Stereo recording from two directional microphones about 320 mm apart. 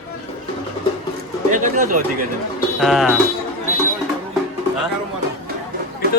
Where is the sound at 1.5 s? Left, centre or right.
Right.